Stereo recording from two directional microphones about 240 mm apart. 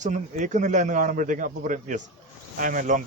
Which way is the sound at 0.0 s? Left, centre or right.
Right.